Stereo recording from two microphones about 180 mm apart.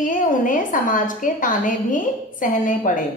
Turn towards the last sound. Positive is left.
turn(degrees=45)  # may be behind; listen again after turning